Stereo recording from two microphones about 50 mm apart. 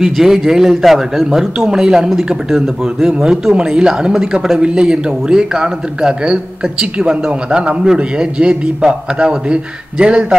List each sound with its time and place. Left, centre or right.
0.0 s a man's voice: centre